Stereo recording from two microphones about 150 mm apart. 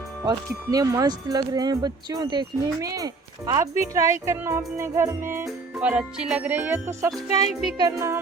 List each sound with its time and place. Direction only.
0.3 s speech: 25° right (ahead or behind)